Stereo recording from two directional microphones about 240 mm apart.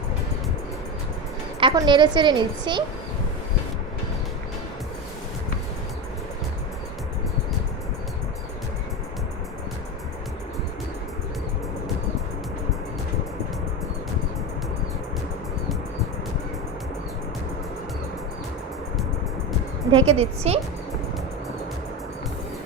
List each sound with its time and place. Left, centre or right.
1.5 s a woman's voice: centre
19.9 s a woman's voice: right